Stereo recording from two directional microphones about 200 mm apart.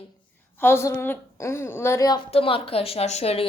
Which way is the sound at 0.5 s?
10° left (ahead or behind).